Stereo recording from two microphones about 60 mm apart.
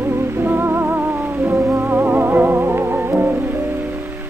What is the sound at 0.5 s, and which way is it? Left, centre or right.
Music, right.